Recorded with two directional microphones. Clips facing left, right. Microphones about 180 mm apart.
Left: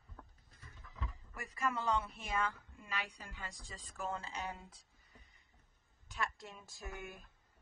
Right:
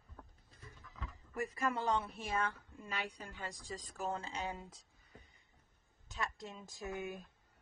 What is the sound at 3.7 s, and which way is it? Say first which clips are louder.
Speech: right 2 dB; 40° right (ahead or behind).